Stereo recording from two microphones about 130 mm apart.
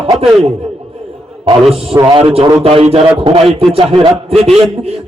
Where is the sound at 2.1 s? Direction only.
45° right (ahead or behind).